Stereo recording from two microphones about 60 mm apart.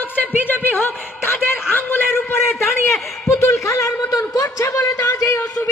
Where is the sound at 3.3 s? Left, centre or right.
Left.